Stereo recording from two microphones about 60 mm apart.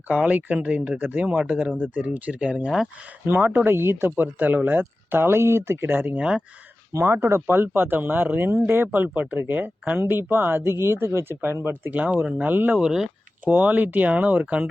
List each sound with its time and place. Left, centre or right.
0.1 s speech: right
3.2 s speech: right
4.2 s speech: right
6.1 s speech: centre
7.1 s speech: right
11.9 s speech: centre
12.5 s speech: right
12.8 s speech: centre
13.4 s speech: right